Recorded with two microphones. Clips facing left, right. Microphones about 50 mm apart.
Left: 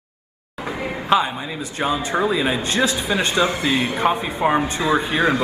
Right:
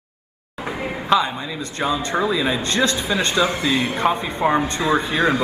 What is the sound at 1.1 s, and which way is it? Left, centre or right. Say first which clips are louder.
Speech: even; left.